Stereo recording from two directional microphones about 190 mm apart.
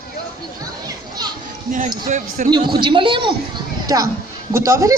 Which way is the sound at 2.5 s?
25° right (ahead or behind).